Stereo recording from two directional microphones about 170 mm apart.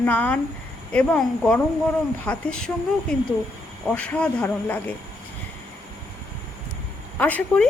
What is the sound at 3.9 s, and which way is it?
A woman's voice, 10° left (ahead or behind).